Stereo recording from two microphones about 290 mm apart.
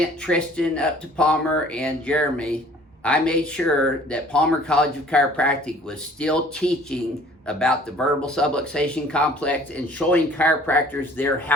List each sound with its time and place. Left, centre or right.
0.0 s speech: centre